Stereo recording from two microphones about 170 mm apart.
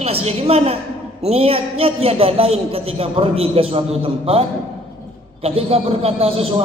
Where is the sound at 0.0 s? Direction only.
35° right (ahead or behind).